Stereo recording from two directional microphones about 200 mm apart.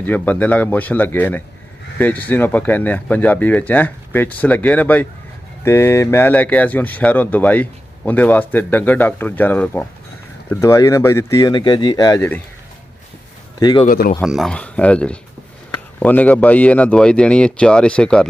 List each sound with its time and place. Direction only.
0.0 s speech: 10° left (ahead or behind)
13.6 s speech: 20° left (ahead or behind)
13.8 s speech: 45° left (ahead or behind)
14.2 s speech: centre (ahead or behind)